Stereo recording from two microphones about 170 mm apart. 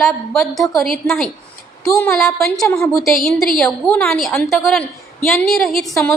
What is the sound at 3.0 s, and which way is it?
A woman's voice, centre (ahead or behind).